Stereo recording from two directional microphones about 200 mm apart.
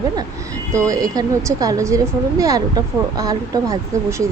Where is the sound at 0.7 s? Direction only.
15° right (ahead or behind).